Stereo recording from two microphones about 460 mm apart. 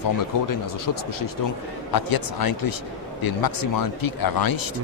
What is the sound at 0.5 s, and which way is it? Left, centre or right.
Speech, left.